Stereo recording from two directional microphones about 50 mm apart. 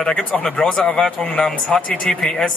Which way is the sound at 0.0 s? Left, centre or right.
Centre.